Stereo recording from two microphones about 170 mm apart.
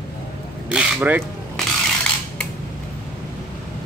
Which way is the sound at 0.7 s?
10° right (ahead or behind).